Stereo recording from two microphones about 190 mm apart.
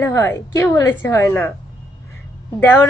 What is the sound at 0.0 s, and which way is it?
A woman's voice, 10° left (ahead or behind).